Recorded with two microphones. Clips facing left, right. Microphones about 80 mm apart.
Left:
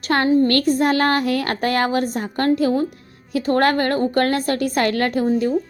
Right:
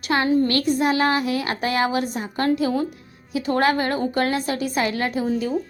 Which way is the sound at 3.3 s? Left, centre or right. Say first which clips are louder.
Left 3 dB; left.